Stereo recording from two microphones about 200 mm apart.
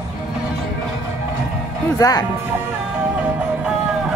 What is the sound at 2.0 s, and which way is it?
Speech, 15° left (ahead or behind).